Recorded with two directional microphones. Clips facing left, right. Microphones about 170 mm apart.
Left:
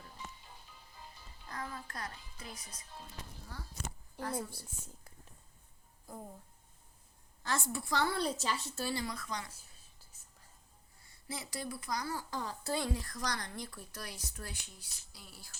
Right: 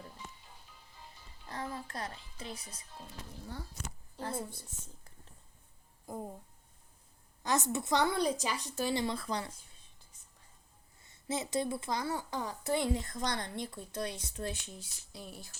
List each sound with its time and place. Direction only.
1.5 s music: 30° right (ahead or behind)
4.2 s a woman's voice: 25° right (ahead or behind)
6.1 s a woman's voice: 25° right (ahead or behind)
7.4 s a woman's voice: 20° right (ahead or behind)
11.0 s a woman's voice: 20° right (ahead or behind)